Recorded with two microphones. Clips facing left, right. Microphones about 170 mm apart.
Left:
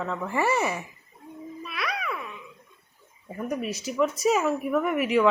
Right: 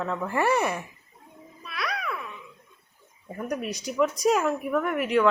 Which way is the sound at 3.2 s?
Centre (ahead or behind).